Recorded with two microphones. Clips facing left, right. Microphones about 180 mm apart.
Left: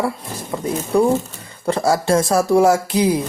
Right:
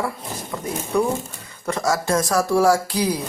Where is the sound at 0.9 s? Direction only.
35° left (ahead or behind).